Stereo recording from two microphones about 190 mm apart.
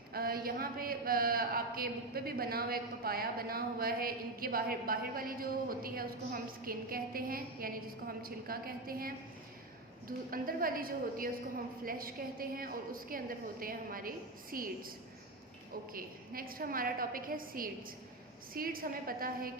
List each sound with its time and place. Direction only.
0.1 s speech: 50° right (ahead or behind)